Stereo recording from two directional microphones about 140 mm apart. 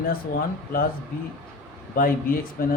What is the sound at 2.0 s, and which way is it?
Speech, 90° left.